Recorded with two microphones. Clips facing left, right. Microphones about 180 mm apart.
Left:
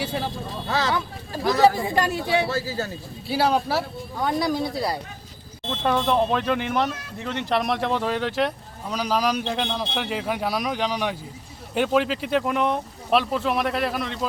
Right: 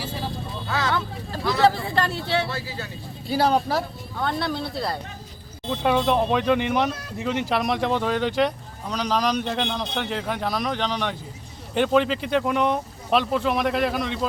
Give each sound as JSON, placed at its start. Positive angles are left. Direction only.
{"t": 0.7, "sound": "speech", "side_deg": 35}
{"t": 1.7, "sound": "speech", "side_deg": 15}
{"t": 2.5, "sound": "speech", "side_deg": 40}
{"t": 3.2, "sound": "speech", "side_deg": 5}
{"t": 5.6, "sound": "speech", "side_deg": -10}